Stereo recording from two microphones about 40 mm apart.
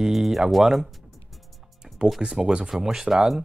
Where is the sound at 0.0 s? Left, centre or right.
Centre.